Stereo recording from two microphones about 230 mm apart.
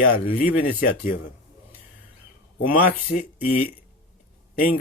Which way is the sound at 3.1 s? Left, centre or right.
Left.